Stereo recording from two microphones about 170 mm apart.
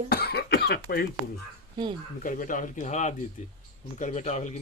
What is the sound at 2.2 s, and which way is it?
Speech, 50° left (ahead or behind).